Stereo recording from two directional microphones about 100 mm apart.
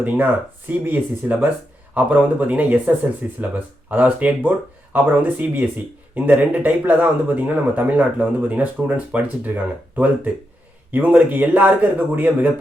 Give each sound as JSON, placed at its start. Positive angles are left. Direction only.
{"t": 0.9, "sound": "speech", "side_deg": -20}